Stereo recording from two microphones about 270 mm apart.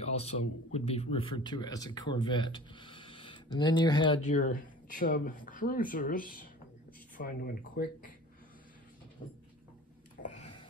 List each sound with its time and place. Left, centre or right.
0.0 s speech: left
4.3 s speech: left
10.2 s a sound: left